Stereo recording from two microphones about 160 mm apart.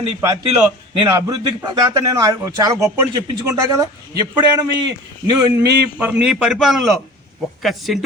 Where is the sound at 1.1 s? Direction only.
20° right (ahead or behind).